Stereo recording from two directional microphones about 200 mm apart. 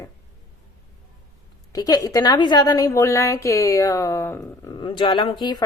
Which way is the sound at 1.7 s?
20° left (ahead or behind).